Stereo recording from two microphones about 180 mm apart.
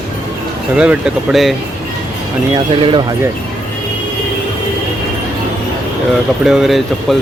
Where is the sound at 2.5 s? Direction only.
25° right (ahead or behind).